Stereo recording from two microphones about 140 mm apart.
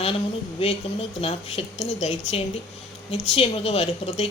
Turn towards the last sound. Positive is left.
turn(degrees=45)  # may be behind; listen again after turning